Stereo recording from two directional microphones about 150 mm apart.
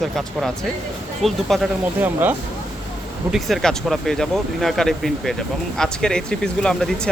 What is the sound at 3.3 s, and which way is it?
Speech, centre (ahead or behind).